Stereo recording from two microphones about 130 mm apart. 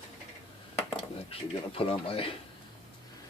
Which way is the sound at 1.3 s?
45° left (ahead or behind).